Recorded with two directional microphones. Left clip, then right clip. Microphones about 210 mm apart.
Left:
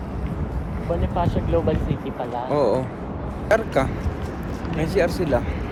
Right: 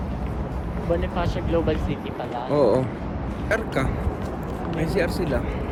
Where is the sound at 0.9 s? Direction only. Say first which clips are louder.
Left 1 dB; 20° left (ahead or behind).